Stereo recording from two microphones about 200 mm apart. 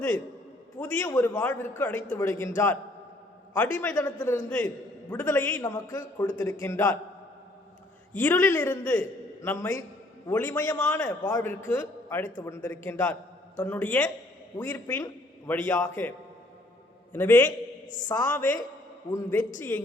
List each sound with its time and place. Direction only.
0.8 s a man's voice: 10° left (ahead or behind)
3.5 s a man's voice: 5° left (ahead or behind)
8.2 s a man's voice: 10° left (ahead or behind)
11.2 s a man's voice: 20° left (ahead or behind)
11.7 s a man's voice: 10° left (ahead or behind)
17.8 s speech: 40° left (ahead or behind)
18.1 s a man's voice: 10° left (ahead or behind)